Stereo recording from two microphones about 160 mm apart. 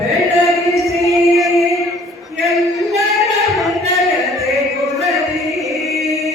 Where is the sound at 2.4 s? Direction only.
Centre (ahead or behind).